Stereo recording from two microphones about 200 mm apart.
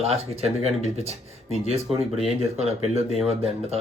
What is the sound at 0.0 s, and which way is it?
Speech, 30° right (ahead or behind).